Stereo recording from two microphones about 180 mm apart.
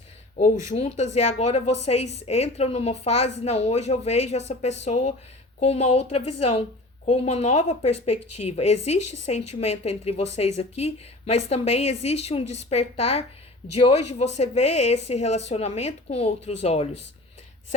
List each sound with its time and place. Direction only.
0.7 s a woman's voice: 40° left (ahead or behind)